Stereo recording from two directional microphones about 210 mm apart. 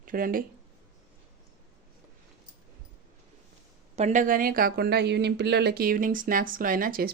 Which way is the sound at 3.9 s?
35° right (ahead or behind).